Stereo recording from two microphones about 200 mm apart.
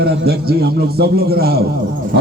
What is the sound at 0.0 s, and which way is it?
A man's voice, 50° right (ahead or behind).